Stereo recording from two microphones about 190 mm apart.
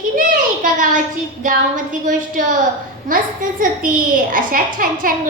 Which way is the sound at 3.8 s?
45° right (ahead or behind).